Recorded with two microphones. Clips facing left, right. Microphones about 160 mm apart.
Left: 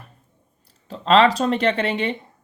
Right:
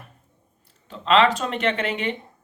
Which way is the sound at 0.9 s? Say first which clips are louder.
Left 3 dB; 35° left (ahead or behind).